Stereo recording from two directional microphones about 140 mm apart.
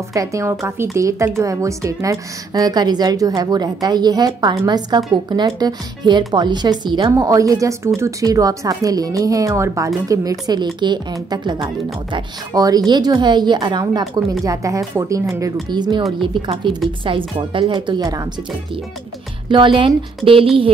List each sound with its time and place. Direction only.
0.1 s a woman's voice: 25° right (ahead or behind)
19.5 s speech: 35° right (ahead or behind)